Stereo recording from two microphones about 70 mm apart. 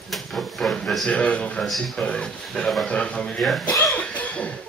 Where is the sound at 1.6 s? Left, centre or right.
Centre.